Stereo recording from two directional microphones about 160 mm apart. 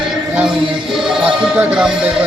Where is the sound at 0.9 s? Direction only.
5° right (ahead or behind).